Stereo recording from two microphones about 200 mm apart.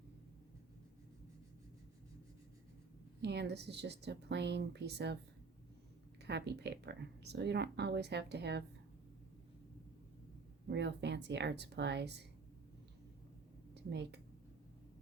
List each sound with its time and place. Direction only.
3.2 s speech: 60° right (ahead or behind)
6.2 s speech: 55° right (ahead or behind)
10.7 s speech: 60° right (ahead or behind)
13.7 s speech: 60° right (ahead or behind)